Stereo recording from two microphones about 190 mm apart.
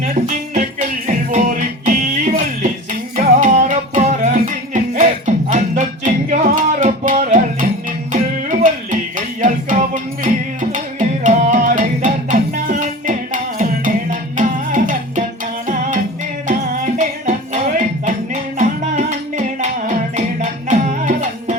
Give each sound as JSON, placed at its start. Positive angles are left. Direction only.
{"t": 0.0, "sound": "music", "side_deg": -45}